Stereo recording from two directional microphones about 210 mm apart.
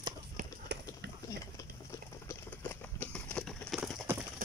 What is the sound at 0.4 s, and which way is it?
Run, 50° right (ahead or behind).